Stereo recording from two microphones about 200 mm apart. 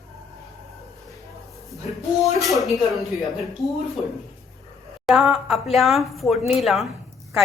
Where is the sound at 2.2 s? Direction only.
Centre (ahead or behind).